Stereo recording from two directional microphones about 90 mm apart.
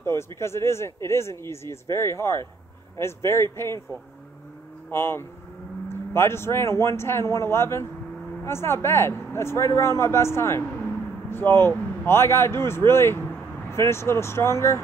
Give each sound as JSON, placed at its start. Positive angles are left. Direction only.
{"t": 0.0, "sound": "speech", "side_deg": 30}